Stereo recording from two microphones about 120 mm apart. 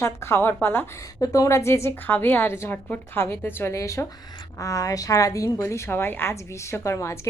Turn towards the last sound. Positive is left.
turn(degrees=25)  # may be behind; listen again after turning